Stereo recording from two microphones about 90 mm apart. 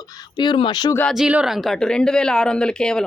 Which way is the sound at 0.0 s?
45° left (ahead or behind).